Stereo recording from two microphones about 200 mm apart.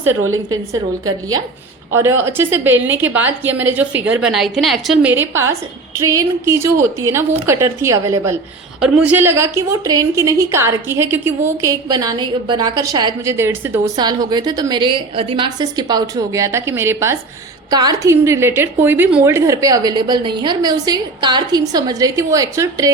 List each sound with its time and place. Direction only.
0.5 s a woman's voice: 20° right (ahead or behind)